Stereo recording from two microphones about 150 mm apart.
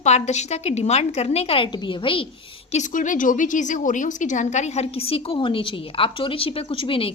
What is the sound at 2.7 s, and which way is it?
A woman's voice, 55° left (ahead or behind).